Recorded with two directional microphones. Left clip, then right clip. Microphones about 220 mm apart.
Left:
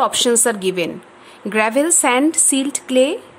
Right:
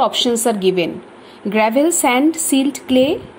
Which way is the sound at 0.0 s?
15° left (ahead or behind).